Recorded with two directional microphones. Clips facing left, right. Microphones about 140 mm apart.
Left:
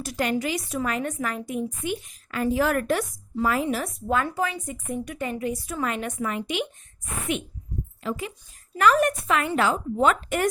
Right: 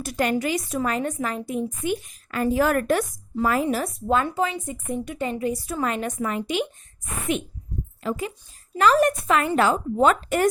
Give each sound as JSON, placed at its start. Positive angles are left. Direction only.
{"t": 0.0, "sound": "a woman's voice", "side_deg": -50}
{"t": 1.8, "sound": "a woman's voice", "side_deg": -45}
{"t": 4.0, "sound": "a woman's voice", "side_deg": -25}
{"t": 8.0, "sound": "a woman's voice", "side_deg": -40}
{"t": 8.7, "sound": "a woman's voice", "side_deg": -30}